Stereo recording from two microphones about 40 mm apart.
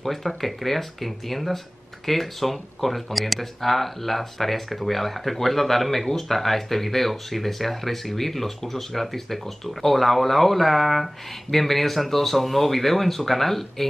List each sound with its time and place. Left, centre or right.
0.0 s speech: centre